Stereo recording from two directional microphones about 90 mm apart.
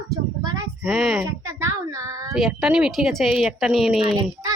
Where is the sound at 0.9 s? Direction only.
Centre (ahead or behind).